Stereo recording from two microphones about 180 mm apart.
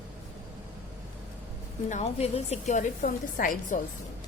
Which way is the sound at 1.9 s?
35° left (ahead or behind).